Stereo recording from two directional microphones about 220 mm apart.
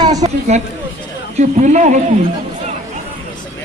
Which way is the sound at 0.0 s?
15° right (ahead or behind).